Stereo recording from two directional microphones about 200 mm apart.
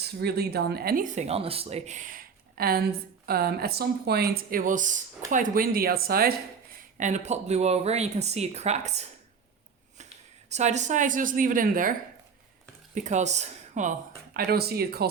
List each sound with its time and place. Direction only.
0.0 s speech: 55° right (ahead or behind)
7.0 s speech: 35° right (ahead or behind)
10.5 s speech: 35° right (ahead or behind)
14.3 s speech: 50° right (ahead or behind)